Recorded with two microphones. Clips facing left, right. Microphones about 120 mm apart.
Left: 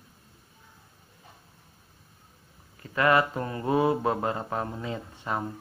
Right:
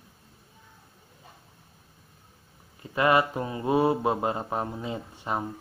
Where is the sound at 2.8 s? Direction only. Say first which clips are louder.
Even; 20° right (ahead or behind).